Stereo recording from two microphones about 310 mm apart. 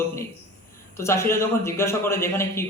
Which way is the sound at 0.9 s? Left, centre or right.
Centre.